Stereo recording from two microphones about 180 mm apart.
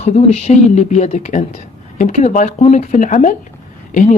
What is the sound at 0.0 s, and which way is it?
Speech, 35° left (ahead or behind).